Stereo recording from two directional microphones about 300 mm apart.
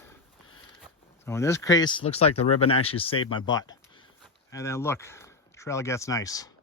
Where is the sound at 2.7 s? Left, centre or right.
Centre.